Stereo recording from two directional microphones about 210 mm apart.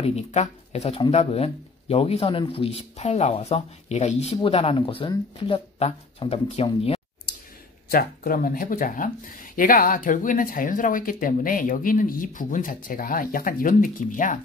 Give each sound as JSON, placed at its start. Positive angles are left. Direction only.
{"t": 0.0, "sound": "speech", "side_deg": 30}
{"t": 7.9, "sound": "speech", "side_deg": 45}